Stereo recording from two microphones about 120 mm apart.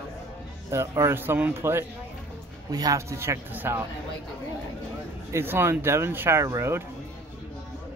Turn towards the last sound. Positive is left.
turn(degrees=-25)  # may be behind; listen again after turning